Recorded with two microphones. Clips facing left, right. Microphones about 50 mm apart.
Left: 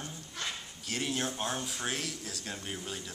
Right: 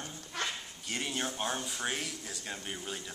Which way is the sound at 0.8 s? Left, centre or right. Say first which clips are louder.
Left 2 dB; centre.